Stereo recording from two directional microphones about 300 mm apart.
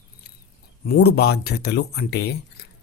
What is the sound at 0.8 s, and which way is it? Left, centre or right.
Speech, left.